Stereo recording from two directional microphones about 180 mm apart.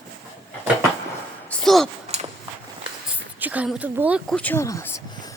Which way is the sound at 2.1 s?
40° right (ahead or behind).